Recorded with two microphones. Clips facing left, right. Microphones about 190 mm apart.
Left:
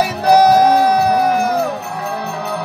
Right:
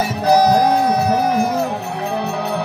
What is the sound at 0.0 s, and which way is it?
Music, 65° left (ahead or behind).